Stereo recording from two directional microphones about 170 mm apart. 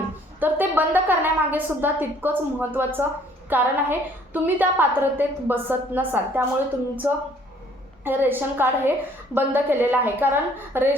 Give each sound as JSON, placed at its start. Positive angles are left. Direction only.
{"t": 0.3, "sound": "a woman's voice", "side_deg": -10}